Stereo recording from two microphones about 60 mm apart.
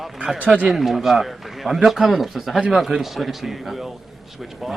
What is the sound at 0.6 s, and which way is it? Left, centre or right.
A man's voice, centre.